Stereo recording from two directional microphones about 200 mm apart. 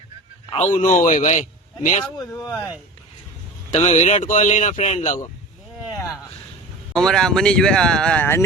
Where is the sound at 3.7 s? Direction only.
35° left (ahead or behind).